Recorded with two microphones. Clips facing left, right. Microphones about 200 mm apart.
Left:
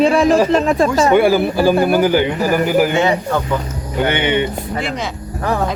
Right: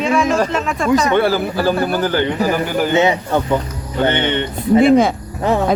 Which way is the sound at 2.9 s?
20° right (ahead or behind).